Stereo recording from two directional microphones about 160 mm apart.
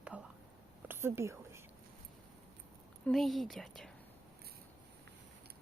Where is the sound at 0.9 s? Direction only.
15° right (ahead or behind).